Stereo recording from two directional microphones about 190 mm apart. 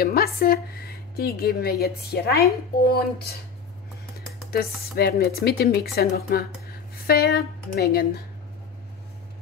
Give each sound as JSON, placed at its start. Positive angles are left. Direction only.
{"t": 0.0, "sound": "speech", "side_deg": 50}
{"t": 4.5, "sound": "speech", "side_deg": 55}